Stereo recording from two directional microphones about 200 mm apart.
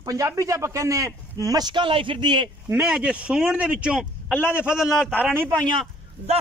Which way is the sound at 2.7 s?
5° right (ahead or behind).